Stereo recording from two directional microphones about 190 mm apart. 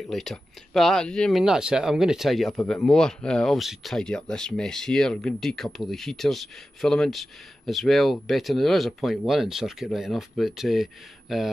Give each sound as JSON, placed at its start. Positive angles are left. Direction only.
{"t": 0.1, "sound": "speech", "side_deg": 0}